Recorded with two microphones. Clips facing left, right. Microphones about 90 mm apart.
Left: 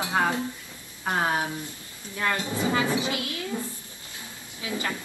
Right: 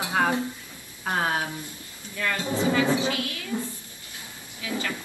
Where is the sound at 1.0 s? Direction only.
20° left (ahead or behind).